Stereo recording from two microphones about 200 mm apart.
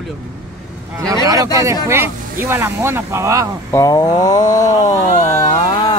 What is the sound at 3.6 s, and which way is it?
Speech, 15° left (ahead or behind).